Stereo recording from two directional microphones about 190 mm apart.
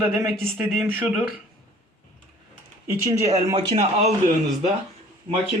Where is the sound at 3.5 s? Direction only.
35° right (ahead or behind).